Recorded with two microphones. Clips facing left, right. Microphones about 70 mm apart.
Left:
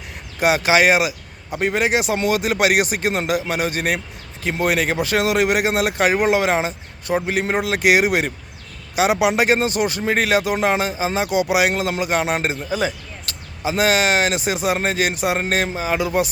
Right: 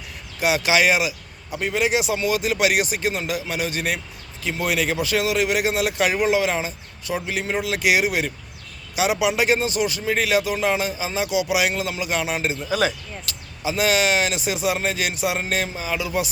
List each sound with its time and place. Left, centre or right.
0.3 s speech: left